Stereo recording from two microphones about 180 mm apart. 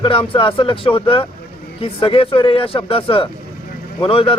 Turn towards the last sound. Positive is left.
turn(degrees=30)  # may be behind; listen again after turning